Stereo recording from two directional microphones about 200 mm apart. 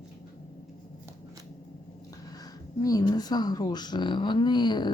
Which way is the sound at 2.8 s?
20° left (ahead or behind).